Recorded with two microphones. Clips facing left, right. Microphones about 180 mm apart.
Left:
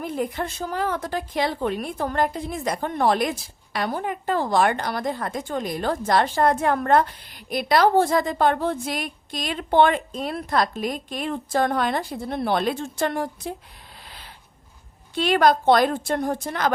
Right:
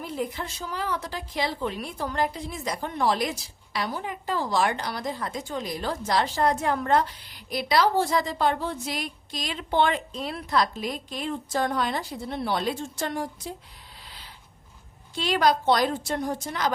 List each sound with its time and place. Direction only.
0.0 s a woman's voice: 55° left (ahead or behind)
15.1 s a woman's voice: 55° left (ahead or behind)